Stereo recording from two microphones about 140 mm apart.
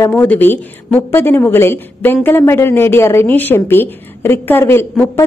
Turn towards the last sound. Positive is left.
turn(degrees=15)  # may be behind; listen again after turning